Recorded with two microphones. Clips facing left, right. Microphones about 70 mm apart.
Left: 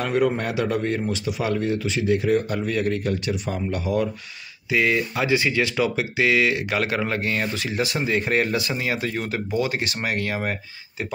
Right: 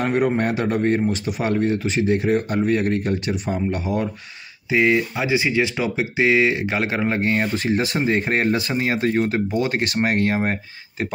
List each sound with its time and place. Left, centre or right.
0.0 s speech: right
4.6 s speech: right
9.6 s speech: right